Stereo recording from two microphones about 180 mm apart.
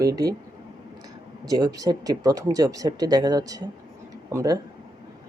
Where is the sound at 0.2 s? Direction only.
20° right (ahead or behind).